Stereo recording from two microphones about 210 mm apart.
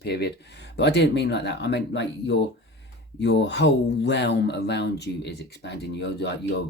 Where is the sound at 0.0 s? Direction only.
50° left (ahead or behind).